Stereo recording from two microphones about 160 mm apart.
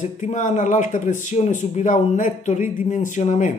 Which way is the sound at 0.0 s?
50° left (ahead or behind).